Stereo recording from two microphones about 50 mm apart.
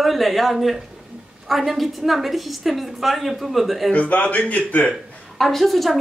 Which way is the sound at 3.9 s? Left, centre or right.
Left.